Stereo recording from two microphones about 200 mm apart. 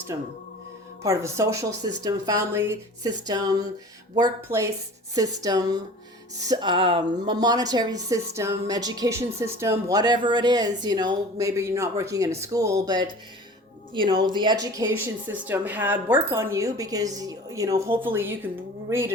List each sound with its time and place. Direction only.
0.1 s speech: 15° right (ahead or behind)